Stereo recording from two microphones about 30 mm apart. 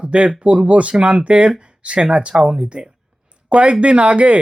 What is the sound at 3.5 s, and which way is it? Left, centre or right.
Speech, right.